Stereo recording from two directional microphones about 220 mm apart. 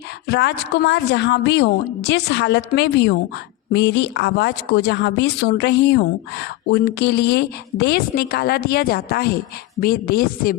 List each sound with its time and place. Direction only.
0.3 s speech: 50° left (ahead or behind)